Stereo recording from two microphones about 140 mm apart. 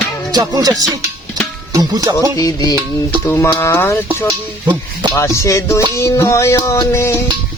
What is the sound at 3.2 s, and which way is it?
Speech, 15° left (ahead or behind).